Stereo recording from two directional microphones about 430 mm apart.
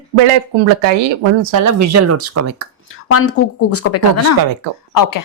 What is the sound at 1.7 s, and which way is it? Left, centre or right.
Speech, right.